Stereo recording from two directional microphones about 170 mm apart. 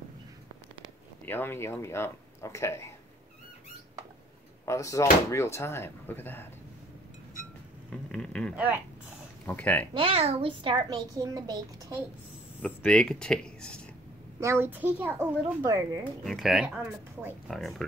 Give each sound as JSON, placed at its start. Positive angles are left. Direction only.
{"t": 1.2, "sound": "speech", "side_deg": 10}
{"t": 4.6, "sound": "speech", "side_deg": 20}
{"t": 7.9, "sound": "a sound", "side_deg": 5}
{"t": 8.5, "sound": "a child's voice", "side_deg": -10}
{"t": 9.5, "sound": "speech", "side_deg": 10}
{"t": 9.9, "sound": "a woman's voice", "side_deg": -35}
{"t": 12.6, "sound": "speech", "side_deg": 5}
{"t": 14.4, "sound": "a child's voice", "side_deg": -15}
{"t": 16.3, "sound": "speech", "side_deg": 0}